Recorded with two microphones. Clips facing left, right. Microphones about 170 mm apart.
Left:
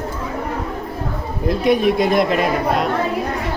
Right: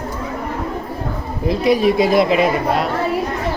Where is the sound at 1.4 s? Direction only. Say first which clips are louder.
Right 1 dB; centre (ahead or behind).